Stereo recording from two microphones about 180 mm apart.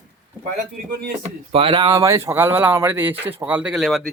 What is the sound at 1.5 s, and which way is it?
Speech, 30° right (ahead or behind).